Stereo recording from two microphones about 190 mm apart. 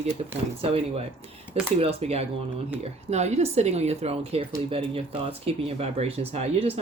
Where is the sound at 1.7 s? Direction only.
30° right (ahead or behind).